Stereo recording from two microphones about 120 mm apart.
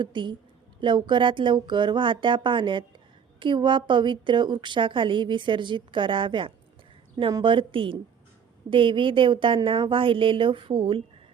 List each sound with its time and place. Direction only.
0.0 s a woman's voice: 40° right (ahead or behind)